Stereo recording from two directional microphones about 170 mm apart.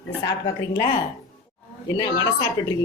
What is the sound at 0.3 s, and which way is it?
Speech, 20° left (ahead or behind).